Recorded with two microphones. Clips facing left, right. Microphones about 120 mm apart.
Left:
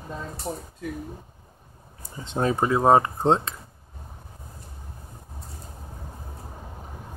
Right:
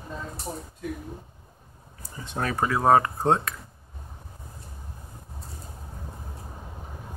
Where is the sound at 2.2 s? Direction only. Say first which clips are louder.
Left 4 dB; 25° left (ahead or behind).